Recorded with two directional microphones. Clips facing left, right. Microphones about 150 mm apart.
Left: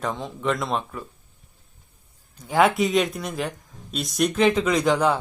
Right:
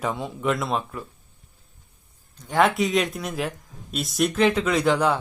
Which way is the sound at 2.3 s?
Centre (ahead or behind).